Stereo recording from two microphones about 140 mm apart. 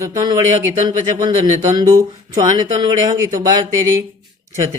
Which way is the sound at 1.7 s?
30° right (ahead or behind).